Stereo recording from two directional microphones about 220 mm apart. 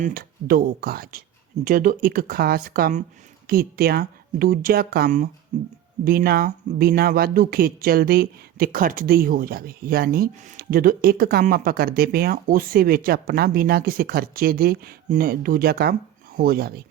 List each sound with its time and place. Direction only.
0.0 s speech: 40° right (ahead or behind)